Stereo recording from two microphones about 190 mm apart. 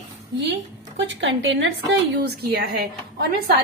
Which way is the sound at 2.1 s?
60° right (ahead or behind).